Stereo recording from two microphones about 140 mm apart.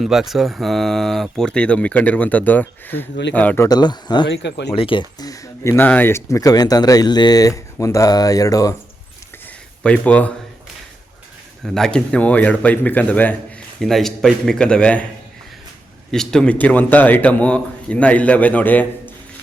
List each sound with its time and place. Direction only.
0.0 s speech: centre (ahead or behind)
3.7 s speech: 30° left (ahead or behind)
9.8 s speech: 10° left (ahead or behind)
11.6 s speech: 5° left (ahead or behind)
16.1 s speech: 5° left (ahead or behind)